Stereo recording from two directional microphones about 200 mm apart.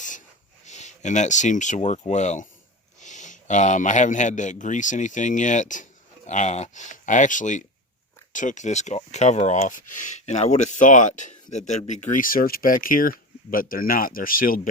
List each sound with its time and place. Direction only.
0.6 s speech: 35° left (ahead or behind)